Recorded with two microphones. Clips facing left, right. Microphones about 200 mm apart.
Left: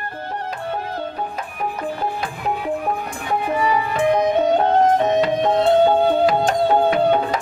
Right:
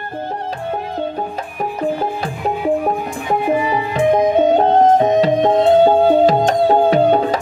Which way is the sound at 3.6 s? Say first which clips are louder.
Right 2 dB; 30° right (ahead or behind).